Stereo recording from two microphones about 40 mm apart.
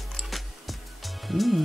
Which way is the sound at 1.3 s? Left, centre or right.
Centre.